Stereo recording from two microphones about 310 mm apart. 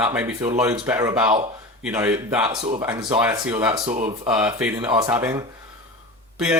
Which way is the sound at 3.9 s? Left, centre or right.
Right.